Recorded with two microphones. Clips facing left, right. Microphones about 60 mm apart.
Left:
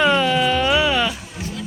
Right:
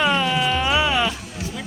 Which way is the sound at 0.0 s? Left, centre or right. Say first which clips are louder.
Left 3 dB; centre.